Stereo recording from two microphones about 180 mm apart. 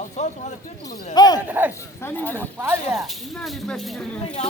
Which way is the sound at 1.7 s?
15° left (ahead or behind).